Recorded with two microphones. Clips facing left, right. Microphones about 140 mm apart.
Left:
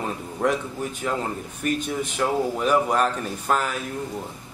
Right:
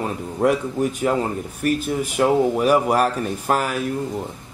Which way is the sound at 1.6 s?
5° right (ahead or behind).